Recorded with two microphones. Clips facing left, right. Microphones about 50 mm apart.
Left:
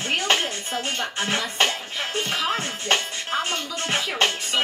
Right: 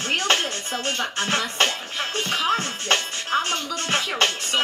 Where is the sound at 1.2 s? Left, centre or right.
Centre.